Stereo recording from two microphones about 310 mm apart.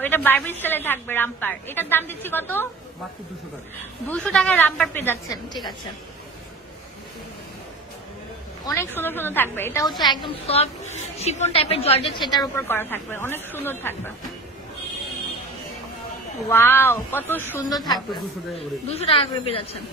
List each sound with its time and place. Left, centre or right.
0.0 s a woman's voice: centre
4.1 s a woman's voice: centre
8.6 s a woman's voice: centre
10.2 s a woman's voice: centre
16.4 s a woman's voice: centre